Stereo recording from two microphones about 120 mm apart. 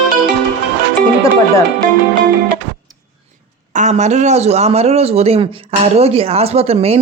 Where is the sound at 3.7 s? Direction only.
80° right.